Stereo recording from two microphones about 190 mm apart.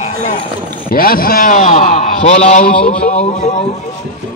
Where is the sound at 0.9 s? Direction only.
50° left (ahead or behind); by 3.6 s 35° left (ahead or behind).